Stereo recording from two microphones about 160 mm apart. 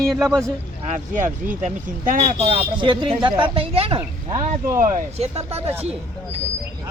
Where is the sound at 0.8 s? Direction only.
50° right (ahead or behind).